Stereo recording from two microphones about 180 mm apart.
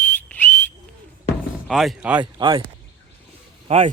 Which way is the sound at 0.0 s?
10° left (ahead or behind).